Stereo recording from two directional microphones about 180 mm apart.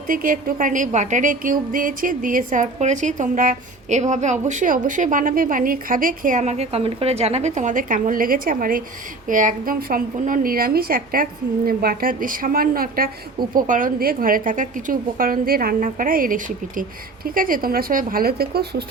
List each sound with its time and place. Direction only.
0.1 s a woman's voice: 50° right (ahead or behind)